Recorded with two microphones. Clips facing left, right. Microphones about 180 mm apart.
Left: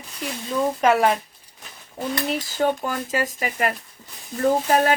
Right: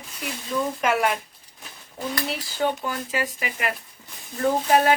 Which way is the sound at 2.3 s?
45° left (ahead or behind).